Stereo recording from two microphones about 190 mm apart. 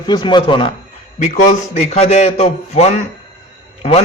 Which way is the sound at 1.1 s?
40° left (ahead or behind).